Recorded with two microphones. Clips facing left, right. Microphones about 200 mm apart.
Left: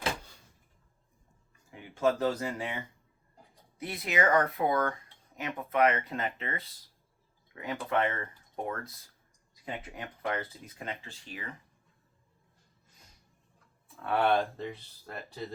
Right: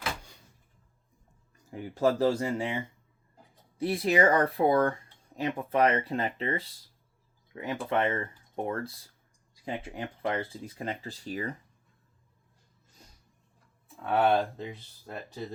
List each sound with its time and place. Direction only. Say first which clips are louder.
1.7 s speech: right 2 dB; 35° right (ahead or behind)
3.8 s speech: right 6 dB; 30° right (ahead or behind)
14.0 s speech: right 2 dB; 20° right (ahead or behind)